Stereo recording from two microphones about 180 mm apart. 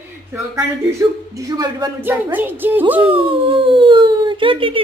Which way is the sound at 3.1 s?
30° right (ahead or behind).